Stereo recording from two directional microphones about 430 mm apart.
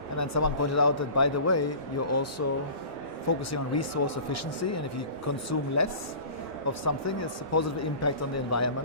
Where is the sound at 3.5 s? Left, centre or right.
Left.